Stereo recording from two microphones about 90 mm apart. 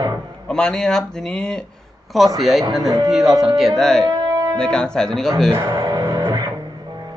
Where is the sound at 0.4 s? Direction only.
10° left (ahead or behind).